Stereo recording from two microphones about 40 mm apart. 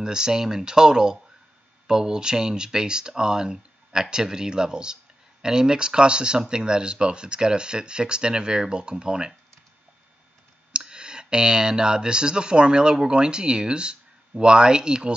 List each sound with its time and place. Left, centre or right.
0.0 s speech: centre
10.7 s speech: right